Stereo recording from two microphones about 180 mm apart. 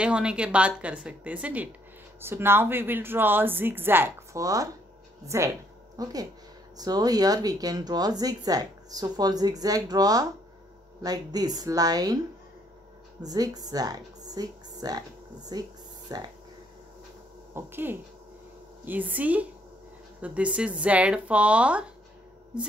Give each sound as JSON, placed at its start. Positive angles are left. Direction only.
{"t": 0.0, "sound": "speech", "side_deg": -5}
{"t": 13.2, "sound": "a woman's voice", "side_deg": -20}
{"t": 17.6, "sound": "speech", "side_deg": -10}